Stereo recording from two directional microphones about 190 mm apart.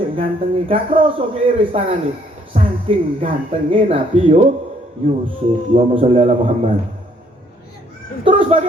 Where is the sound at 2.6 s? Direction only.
30° right (ahead or behind).